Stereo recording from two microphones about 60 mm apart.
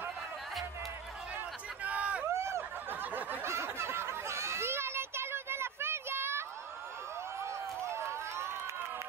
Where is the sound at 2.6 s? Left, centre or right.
Right.